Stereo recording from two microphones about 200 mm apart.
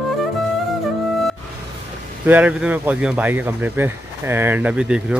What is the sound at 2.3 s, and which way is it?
Speech, 5° right (ahead or behind).